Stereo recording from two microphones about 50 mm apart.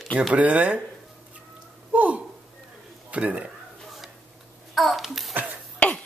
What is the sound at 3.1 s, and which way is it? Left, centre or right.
Speech, right.